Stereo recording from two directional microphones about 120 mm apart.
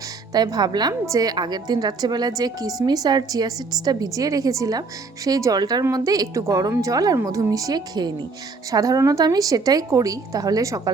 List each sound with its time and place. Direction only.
0.3 s a woman's voice: 35° right (ahead or behind)